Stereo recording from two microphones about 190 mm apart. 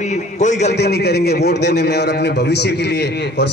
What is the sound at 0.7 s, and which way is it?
A man's voice, 60° left (ahead or behind).